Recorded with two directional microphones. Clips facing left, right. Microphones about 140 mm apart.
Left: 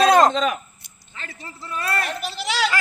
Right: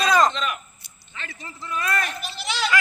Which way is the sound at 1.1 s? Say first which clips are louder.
Even; 35° left (ahead or behind).